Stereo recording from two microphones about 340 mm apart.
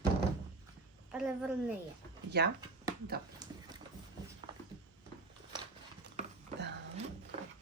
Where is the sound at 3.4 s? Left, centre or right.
Centre.